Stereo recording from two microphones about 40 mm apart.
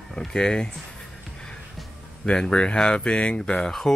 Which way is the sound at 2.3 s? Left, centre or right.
Left.